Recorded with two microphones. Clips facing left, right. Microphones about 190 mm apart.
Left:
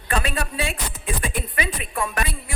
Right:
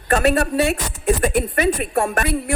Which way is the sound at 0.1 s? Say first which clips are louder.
Right 9 dB; 45° right (ahead or behind).